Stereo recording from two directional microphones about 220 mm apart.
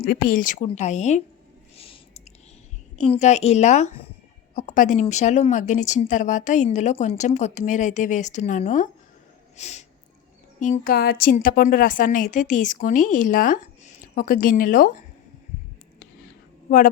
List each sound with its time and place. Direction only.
0.0 s a woman's voice: 40° left (ahead or behind)
1.7 s a sound: 25° left (ahead or behind)
3.0 s a woman's voice: 30° left (ahead or behind)
16.6 s speech: 40° left (ahead or behind)